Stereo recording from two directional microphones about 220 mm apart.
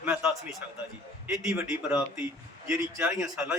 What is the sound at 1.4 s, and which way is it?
Speech, 5° right (ahead or behind).